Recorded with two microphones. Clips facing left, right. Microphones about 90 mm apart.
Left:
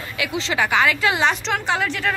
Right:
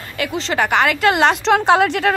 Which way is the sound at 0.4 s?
45° right (ahead or behind).